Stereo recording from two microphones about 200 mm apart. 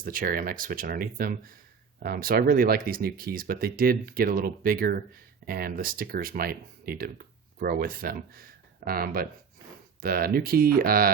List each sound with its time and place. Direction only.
0.0 s speech: 45° right (ahead or behind)